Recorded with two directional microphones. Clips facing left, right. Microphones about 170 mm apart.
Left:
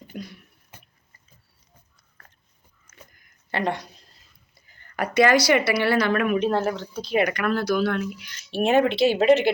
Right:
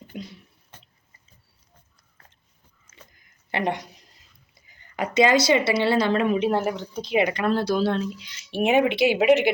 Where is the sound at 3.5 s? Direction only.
20° right (ahead or behind).